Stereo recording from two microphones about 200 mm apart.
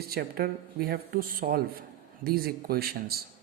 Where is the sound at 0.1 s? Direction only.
50° right (ahead or behind).